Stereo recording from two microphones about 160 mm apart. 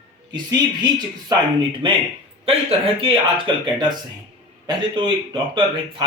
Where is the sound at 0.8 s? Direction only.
25° right (ahead or behind).